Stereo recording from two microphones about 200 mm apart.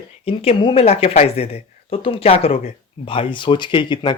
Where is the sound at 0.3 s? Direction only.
30° left (ahead or behind).